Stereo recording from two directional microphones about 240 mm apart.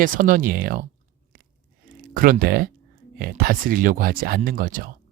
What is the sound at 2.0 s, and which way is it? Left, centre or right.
Speech, right.